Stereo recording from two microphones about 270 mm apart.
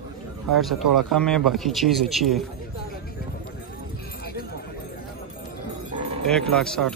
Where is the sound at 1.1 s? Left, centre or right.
Centre.